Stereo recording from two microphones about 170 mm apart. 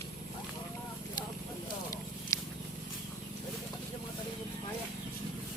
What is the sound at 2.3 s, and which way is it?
Walk, 20° left (ahead or behind).